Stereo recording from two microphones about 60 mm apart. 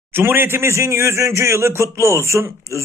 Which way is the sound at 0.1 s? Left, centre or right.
Right.